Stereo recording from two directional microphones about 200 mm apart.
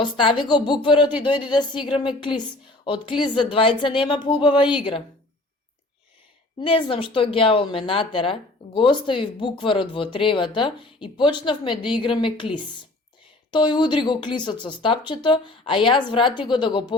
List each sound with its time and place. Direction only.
0.0 s a woman's voice: 25° left (ahead or behind)
6.6 s a woman's voice: 25° left (ahead or behind)